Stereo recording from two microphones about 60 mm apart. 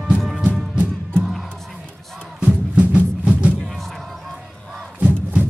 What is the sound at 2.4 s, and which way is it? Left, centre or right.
Music, right.